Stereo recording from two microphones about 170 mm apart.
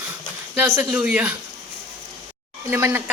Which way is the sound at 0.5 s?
10° right (ahead or behind).